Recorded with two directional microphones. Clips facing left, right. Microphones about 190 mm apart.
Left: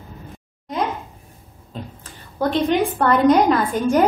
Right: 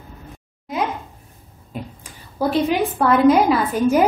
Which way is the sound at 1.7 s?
10° right (ahead or behind).